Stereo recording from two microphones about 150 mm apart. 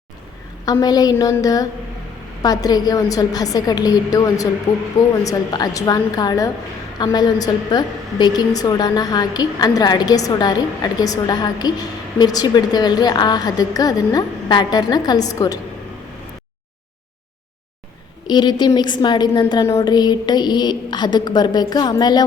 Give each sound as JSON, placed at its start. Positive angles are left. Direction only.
{"t": 0.6, "sound": "a woman's voice", "side_deg": 25}
{"t": 18.3, "sound": "a woman's voice", "side_deg": 30}